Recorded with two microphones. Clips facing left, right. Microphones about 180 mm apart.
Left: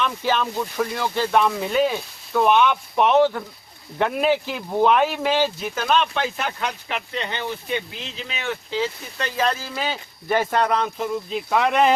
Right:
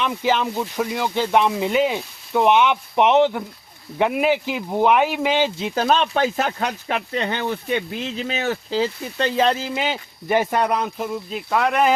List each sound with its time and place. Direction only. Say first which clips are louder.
0.0 s speech: right 2 dB; 15° right (ahead or behind)